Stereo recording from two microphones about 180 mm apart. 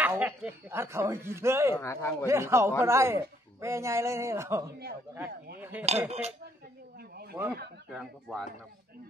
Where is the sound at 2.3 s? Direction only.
15° right (ahead or behind).